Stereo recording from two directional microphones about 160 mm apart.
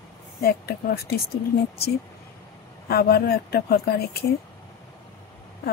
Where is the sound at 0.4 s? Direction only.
75° left (ahead or behind).